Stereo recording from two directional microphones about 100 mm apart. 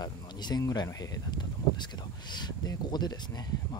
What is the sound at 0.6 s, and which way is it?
Speech, 40° left (ahead or behind).